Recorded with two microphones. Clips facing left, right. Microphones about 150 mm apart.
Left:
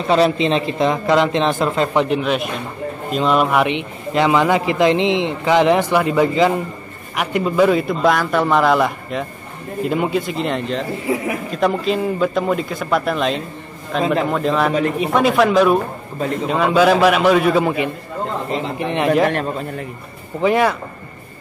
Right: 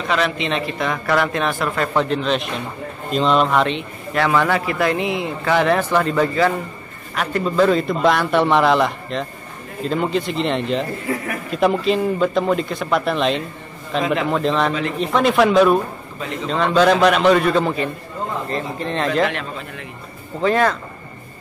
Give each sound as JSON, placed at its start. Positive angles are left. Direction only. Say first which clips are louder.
{"t": 0.1, "sound": "a man's voice", "louder": "left 6 dB", "side_deg": 30}
{"t": 14.7, "sound": "a man's voice", "louder": "left 5 dB", "side_deg": 45}
{"t": 15.0, "sound": "a man's voice", "louder": "right 1 dB", "side_deg": 5}
{"t": 19.2, "sound": "a man's voice", "louder": "left 5 dB", "side_deg": 45}
{"t": 20.3, "sound": "a man's voice", "louder": "left 2 dB", "side_deg": 10}